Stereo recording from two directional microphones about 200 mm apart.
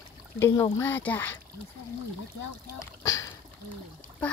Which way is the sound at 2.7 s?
15° left (ahead or behind).